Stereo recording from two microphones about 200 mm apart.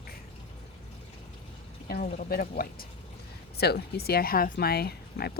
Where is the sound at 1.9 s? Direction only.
50° left (ahead or behind).